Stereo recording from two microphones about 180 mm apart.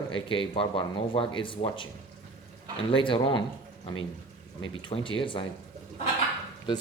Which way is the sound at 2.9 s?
30° left (ahead or behind).